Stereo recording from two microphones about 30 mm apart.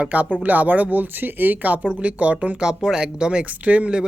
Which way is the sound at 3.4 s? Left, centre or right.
Right.